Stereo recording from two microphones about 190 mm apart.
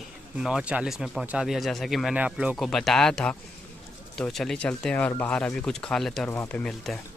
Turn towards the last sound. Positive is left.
turn(degrees=5)  # may be behind; listen again after turning